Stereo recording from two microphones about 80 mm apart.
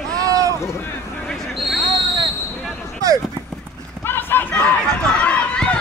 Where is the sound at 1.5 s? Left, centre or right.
Centre.